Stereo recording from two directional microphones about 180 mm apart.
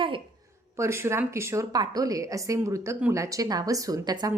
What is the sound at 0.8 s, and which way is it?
A woman's voice, 15° right (ahead or behind).